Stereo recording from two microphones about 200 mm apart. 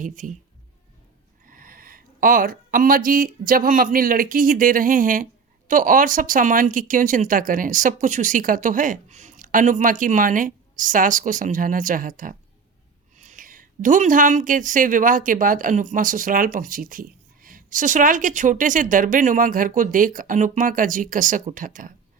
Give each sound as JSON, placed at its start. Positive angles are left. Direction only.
{"t": 0.0, "sound": "speech", "side_deg": -40}
{"t": 1.5, "sound": "speech", "side_deg": -45}